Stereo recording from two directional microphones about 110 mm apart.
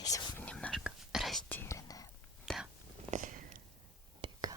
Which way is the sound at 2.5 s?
5° left (ahead or behind).